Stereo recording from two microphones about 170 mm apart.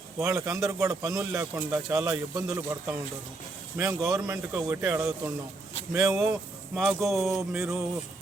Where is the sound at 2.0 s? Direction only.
20° right (ahead or behind).